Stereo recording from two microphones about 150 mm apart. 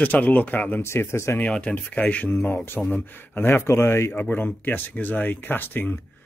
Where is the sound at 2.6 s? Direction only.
15° left (ahead or behind).